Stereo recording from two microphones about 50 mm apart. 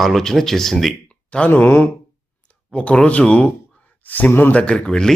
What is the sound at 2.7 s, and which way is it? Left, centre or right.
Speech, left.